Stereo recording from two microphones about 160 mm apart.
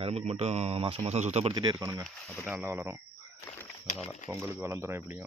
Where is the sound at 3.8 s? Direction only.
50° left (ahead or behind).